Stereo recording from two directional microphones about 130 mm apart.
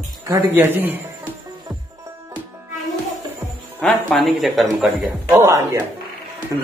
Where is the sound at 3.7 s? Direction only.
Centre (ahead or behind).